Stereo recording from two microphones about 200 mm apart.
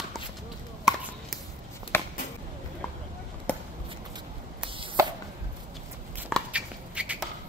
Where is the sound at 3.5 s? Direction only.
5° left (ahead or behind).